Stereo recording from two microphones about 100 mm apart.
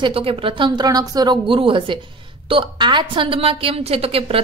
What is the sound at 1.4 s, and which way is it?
A woman's voice, 60° right (ahead or behind).